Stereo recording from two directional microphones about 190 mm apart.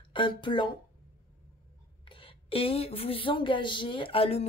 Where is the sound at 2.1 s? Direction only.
30° left (ahead or behind).